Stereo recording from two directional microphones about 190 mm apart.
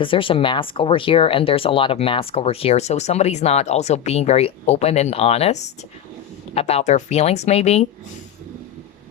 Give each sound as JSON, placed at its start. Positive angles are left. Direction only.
{"t": 0.0, "sound": "speech", "side_deg": 25}